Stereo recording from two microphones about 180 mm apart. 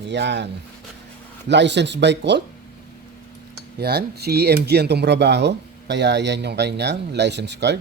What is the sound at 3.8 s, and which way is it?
Speech, 65° right (ahead or behind).